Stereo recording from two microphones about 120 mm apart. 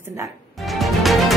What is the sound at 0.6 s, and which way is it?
Music, centre (ahead or behind).